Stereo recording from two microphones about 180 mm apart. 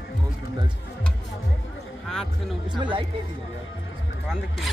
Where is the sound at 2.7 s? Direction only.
25° right (ahead or behind).